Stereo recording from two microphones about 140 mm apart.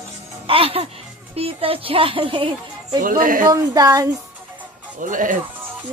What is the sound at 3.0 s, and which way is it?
Speech, 80° right.